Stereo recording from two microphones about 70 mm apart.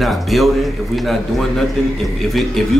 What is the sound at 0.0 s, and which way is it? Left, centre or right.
A man's voice, centre.